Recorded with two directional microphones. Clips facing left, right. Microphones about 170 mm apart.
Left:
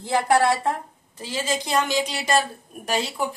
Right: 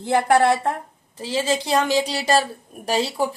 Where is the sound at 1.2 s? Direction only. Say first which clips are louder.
Right 4 dB; 30° right (ahead or behind).